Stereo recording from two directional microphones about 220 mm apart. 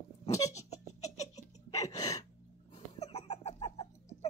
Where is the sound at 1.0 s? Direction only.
30° left (ahead or behind).